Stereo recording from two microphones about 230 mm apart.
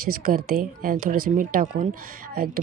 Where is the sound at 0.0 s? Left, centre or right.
Right.